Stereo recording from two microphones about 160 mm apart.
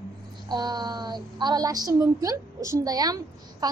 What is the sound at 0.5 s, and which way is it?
A woman's voice, 25° right (ahead or behind).